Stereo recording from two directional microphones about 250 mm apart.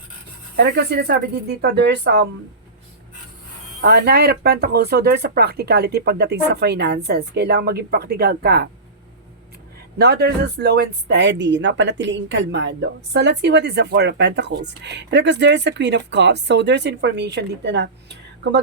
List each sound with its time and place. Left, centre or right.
0.5 s speech: right
3.8 s speech: right
10.0 s speech: right